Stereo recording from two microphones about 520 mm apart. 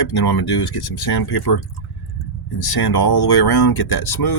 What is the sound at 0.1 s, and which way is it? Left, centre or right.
Speech, left.